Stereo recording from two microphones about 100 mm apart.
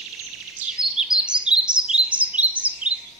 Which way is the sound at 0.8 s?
5° right (ahead or behind).